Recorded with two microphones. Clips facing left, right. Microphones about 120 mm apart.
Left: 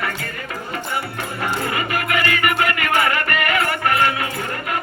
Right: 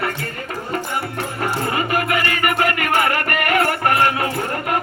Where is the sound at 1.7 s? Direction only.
40° right (ahead or behind).